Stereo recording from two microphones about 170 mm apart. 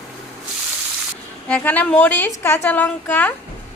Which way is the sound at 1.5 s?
10° left (ahead or behind).